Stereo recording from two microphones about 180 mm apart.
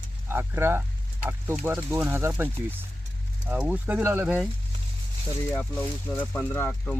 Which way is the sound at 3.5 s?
10° right (ahead or behind).